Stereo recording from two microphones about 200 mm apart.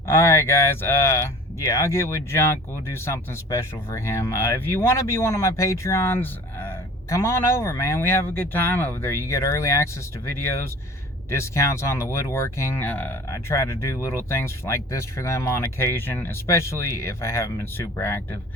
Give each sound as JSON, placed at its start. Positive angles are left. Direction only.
{"t": 0.1, "sound": "speech", "side_deg": 15}